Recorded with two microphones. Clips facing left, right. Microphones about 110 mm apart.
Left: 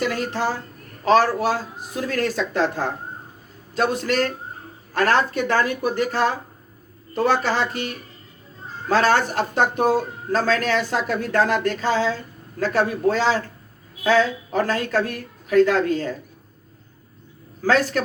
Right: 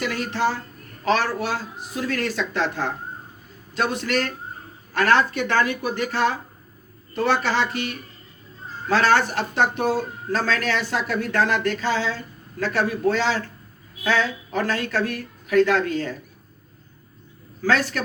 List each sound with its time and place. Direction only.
0.0 s speech: 35° left (ahead or behind)
17.7 s speech: 40° left (ahead or behind)